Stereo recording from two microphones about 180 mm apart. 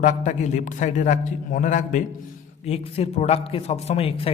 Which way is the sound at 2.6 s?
35° left (ahead or behind).